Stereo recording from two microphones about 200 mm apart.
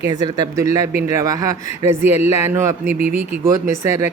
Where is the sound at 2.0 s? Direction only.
35° left (ahead or behind).